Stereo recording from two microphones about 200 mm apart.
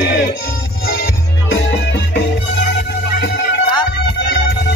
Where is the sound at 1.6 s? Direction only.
60° left (ahead or behind).